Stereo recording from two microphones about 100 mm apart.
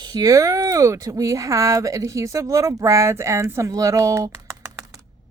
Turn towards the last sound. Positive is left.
turn(degrees=-30)  # may be behind; listen again after turning